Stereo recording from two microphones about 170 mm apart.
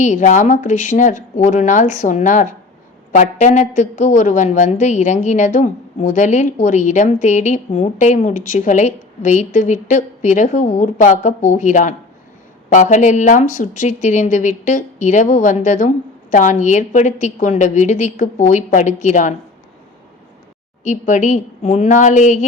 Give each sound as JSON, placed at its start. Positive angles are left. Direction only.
{"t": 0.0, "sound": "a woman's voice", "side_deg": 45}
{"t": 20.8, "sound": "a woman's voice", "side_deg": 45}